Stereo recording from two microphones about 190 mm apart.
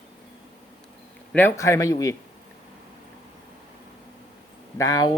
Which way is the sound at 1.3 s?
15° left (ahead or behind).